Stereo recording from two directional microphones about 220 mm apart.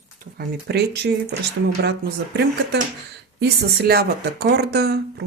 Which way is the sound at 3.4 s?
45° right (ahead or behind).